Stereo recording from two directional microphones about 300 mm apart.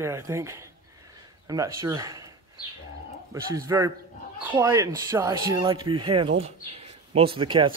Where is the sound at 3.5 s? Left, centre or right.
Centre.